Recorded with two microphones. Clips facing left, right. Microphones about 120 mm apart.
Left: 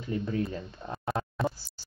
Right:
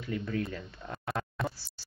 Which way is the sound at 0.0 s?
25° left (ahead or behind).